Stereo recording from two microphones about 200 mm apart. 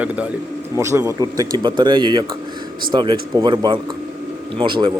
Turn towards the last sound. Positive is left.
turn(degrees=-25)  # may be behind; listen again after turning